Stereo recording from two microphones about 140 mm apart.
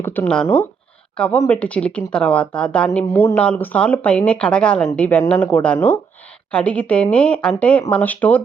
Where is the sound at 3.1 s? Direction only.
25° left (ahead or behind).